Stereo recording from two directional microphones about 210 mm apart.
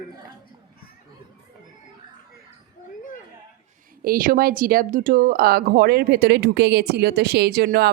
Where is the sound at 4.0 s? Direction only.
40° right (ahead or behind).